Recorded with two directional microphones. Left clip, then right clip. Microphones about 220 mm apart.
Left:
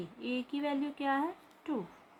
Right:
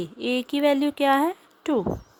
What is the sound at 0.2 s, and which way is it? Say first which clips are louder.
Speech: right 13 dB; 50° right (ahead or behind).